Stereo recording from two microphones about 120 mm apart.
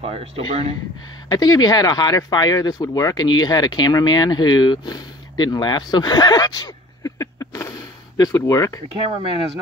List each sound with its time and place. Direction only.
0.0 s speech: 55° right (ahead or behind)
1.3 s speech: 35° left (ahead or behind)